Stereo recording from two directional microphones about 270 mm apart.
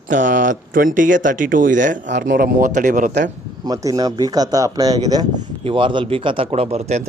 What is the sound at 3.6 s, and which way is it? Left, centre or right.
Speech, centre.